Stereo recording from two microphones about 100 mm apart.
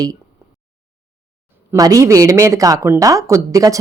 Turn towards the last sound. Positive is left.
turn(degrees=-35)  # may be behind; listen again after turning